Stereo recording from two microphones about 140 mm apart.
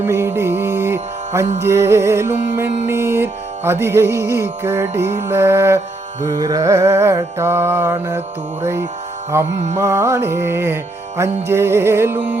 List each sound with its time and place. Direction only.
0.0 s music: 15° right (ahead or behind)
6.2 s music: 30° right (ahead or behind); by 12.4 s 10° right (ahead or behind)